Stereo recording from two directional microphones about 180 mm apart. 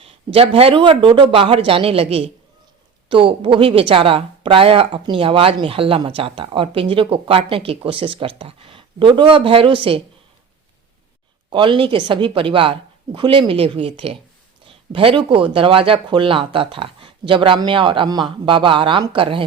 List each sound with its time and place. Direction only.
0.3 s a woman's voice: 30° right (ahead or behind)
11.5 s a woman's voice: 25° right (ahead or behind)